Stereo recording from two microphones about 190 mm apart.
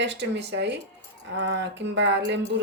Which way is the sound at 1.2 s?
65° right (ahead or behind).